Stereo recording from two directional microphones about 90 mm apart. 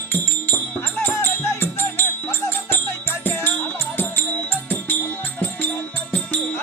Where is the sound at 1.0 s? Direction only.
25° left (ahead or behind).